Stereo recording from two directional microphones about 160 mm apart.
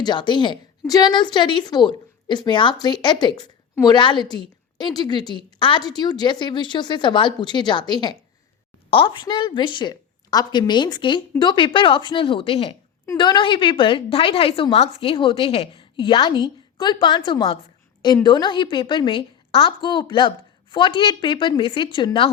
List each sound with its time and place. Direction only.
0.0 s a woman's voice: 30° left (ahead or behind)